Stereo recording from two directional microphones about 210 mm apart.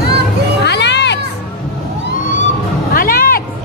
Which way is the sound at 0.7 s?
55° left (ahead or behind).